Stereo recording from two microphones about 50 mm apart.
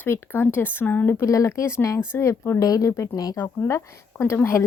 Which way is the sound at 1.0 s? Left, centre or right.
Left.